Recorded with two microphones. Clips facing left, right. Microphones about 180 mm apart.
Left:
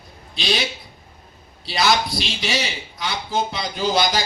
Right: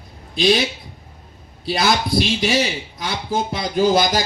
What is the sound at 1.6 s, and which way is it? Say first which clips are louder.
A man's voice: right 1 dB; 50° right (ahead or behind).